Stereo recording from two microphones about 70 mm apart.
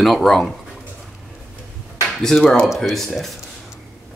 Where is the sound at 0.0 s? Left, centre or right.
Centre.